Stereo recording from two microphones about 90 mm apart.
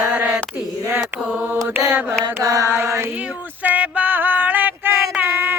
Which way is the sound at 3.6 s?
15° right (ahead or behind).